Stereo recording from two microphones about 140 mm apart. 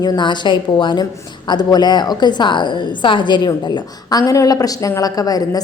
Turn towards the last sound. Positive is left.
turn(degrees=25)  # may be behind; listen again after turning